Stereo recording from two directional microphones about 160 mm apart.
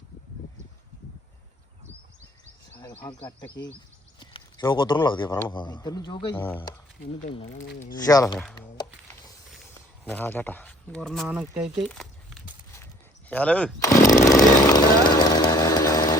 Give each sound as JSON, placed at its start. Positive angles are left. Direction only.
{"t": 2.7, "sound": "a sound", "side_deg": 10}
{"t": 3.0, "sound": "speech", "side_deg": 25}
{"t": 6.3, "sound": "speech", "side_deg": 10}
{"t": 7.9, "sound": "speech", "side_deg": 20}
{"t": 10.0, "sound": "speech", "side_deg": 10}
{"t": 11.9, "sound": "crumpling", "side_deg": 5}
{"t": 12.8, "sound": "a sound", "side_deg": 10}
{"t": 14.0, "sound": "chainsaw", "side_deg": 50}
{"t": 14.3, "sound": "chainsaw", "side_deg": 20}